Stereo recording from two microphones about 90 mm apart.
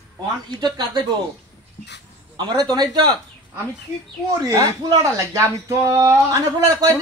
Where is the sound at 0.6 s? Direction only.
55° right (ahead or behind).